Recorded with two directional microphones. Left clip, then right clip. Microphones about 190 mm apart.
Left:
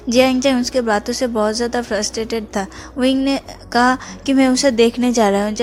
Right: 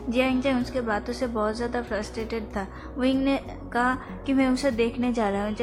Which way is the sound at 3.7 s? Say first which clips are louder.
Left 10 dB; 45° left (ahead or behind).